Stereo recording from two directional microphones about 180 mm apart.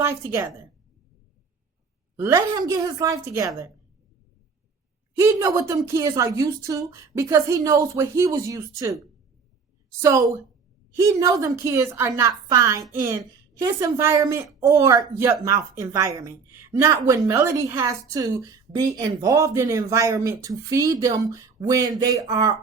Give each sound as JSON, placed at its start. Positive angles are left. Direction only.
{"t": 0.0, "sound": "a woman's voice", "side_deg": -15}
{"t": 2.1, "sound": "a woman's voice", "side_deg": -15}
{"t": 5.1, "sound": "a woman's voice", "side_deg": -15}
{"t": 10.0, "sound": "a woman's voice", "side_deg": -15}